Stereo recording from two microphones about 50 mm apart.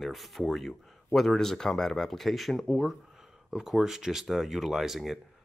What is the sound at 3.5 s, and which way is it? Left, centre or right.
Speech, centre.